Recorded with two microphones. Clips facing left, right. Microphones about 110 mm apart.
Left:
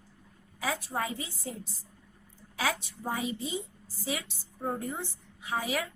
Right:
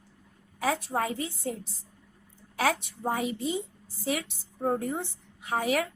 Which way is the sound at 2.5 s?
55° right (ahead or behind).